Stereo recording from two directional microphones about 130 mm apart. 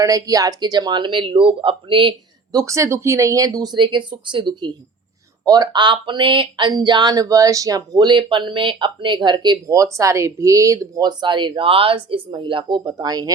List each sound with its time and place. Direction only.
0.0 s speech: 25° right (ahead or behind)